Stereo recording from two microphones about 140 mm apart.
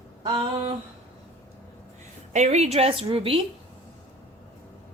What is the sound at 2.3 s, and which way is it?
Speech, 55° right (ahead or behind).